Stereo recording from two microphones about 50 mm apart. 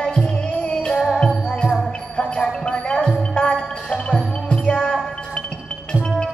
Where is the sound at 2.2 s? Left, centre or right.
Centre.